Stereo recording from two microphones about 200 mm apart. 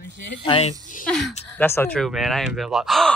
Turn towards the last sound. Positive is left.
turn(degrees=0)  # may be behind; listen again after turning